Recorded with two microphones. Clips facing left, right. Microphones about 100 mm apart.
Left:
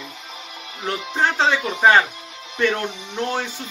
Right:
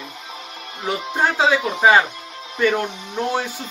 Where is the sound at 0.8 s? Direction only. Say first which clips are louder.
Right 1 dB; 10° right (ahead or behind).